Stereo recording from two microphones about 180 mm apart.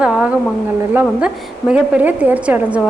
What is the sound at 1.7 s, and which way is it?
A woman's voice, 10° right (ahead or behind).